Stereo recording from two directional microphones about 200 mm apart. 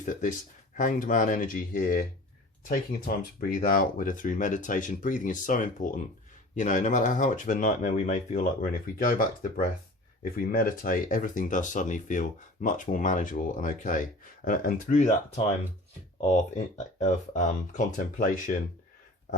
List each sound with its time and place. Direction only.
0.0 s speech: 40° left (ahead or behind)
3.4 s speech: 45° left (ahead or behind)
16.3 s speech: 35° left (ahead or behind)